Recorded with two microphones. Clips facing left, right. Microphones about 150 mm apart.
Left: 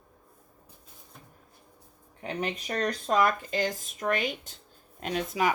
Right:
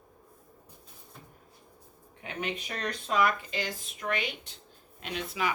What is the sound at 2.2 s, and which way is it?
Speech, 40° left (ahead or behind).